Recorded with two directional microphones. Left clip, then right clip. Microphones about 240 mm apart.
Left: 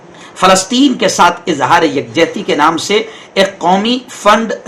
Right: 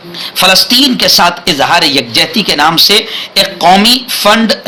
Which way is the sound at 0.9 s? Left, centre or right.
Right.